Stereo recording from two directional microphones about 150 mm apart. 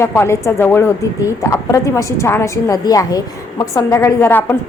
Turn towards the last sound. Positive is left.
turn(degrees=15)  # may be behind; listen again after turning